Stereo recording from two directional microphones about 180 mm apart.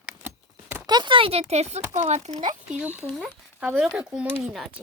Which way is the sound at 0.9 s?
25° right (ahead or behind).